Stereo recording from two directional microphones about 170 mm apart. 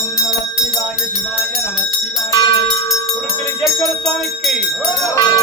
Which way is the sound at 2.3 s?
20° left (ahead or behind).